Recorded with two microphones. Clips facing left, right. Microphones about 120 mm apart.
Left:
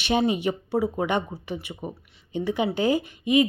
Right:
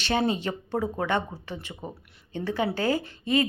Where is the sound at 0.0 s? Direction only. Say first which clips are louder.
Left 3 dB; 15° left (ahead or behind).